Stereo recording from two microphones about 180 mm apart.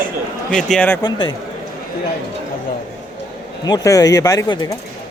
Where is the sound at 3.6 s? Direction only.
20° left (ahead or behind).